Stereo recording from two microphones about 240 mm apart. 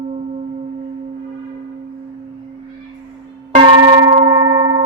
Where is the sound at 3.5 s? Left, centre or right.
Right.